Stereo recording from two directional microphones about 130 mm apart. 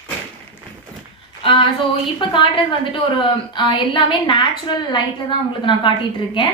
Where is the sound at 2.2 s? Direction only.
40° left (ahead or behind).